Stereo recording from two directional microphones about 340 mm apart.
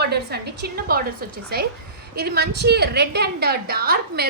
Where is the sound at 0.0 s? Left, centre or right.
Right.